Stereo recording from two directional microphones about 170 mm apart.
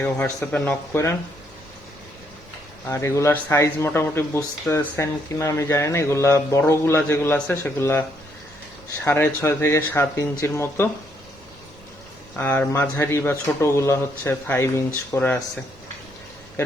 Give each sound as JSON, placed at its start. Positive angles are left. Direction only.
{"t": 0.0, "sound": "speech", "side_deg": 10}
{"t": 2.9, "sound": "speech", "side_deg": 15}
{"t": 9.0, "sound": "speech", "side_deg": 15}
{"t": 12.4, "sound": "speech", "side_deg": 10}